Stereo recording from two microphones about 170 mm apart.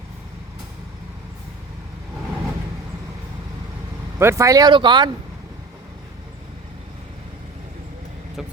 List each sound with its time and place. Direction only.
4.2 s speech: 15° right (ahead or behind)
8.4 s vehicle: 5° right (ahead or behind)